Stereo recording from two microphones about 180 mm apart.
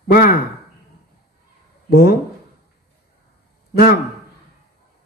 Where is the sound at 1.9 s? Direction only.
60° left (ahead or behind).